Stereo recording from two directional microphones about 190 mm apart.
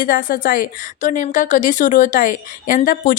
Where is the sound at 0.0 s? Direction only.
45° left (ahead or behind).